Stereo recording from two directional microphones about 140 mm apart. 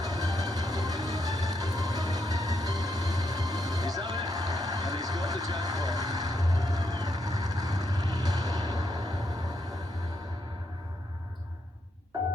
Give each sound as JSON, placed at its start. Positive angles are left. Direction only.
{"t": 0.0, "sound": "music", "side_deg": -25}